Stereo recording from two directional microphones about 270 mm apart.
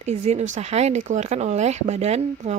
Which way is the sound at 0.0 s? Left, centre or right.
Right.